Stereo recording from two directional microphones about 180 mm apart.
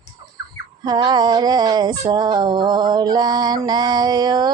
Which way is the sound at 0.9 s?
20° right (ahead or behind).